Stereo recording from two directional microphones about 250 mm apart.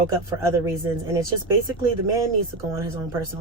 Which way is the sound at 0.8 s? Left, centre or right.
Centre.